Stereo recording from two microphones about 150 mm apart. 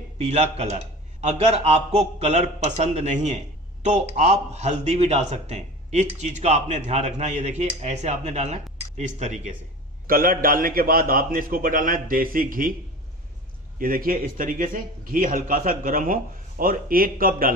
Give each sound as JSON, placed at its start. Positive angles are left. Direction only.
{"t": 0.2, "sound": "a man's voice", "side_deg": -45}
{"t": 10.0, "sound": "a man's voice", "side_deg": -75}
{"t": 13.7, "sound": "a man's voice", "side_deg": -70}